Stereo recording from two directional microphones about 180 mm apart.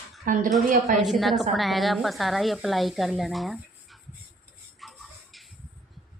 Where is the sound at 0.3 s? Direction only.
50° right (ahead or behind).